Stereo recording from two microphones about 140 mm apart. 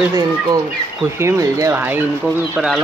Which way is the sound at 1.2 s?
20° right (ahead or behind).